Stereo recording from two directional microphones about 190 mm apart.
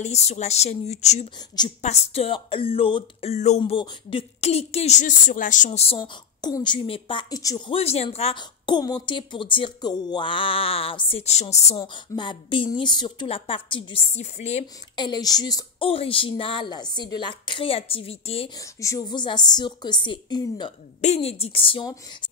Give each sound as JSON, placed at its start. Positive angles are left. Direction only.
{"t": 0.0, "sound": "speech", "side_deg": 35}
{"t": 15.0, "sound": "speech", "side_deg": 20}
{"t": 18.6, "sound": "speech", "side_deg": 15}
{"t": 21.0, "sound": "speech", "side_deg": 35}